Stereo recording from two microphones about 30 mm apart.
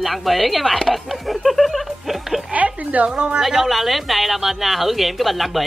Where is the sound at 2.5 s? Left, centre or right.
Right.